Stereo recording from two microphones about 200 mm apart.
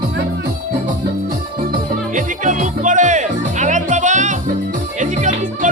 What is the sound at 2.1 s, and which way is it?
Music, 40° right (ahead or behind).